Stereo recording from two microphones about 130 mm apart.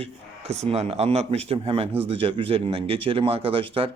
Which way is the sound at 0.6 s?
50° right (ahead or behind).